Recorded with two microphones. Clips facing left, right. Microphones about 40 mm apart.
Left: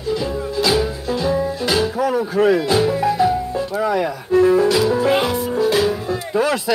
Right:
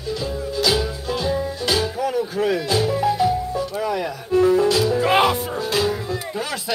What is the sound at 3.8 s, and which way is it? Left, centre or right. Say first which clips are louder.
Music: left 5 dB; left.